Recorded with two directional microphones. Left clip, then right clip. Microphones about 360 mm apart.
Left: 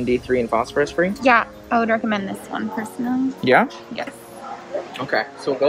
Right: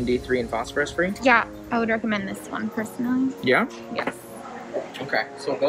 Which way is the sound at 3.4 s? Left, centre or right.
Left.